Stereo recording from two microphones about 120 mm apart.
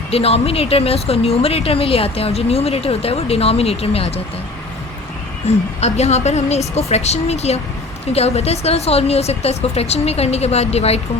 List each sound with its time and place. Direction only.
0.1 s speech: 55° left (ahead or behind)
5.5 s speech: 65° left (ahead or behind)